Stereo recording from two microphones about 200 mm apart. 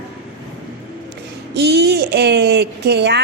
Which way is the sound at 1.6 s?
55° right (ahead or behind).